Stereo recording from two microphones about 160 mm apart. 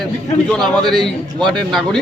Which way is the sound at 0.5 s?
Centre (ahead or behind).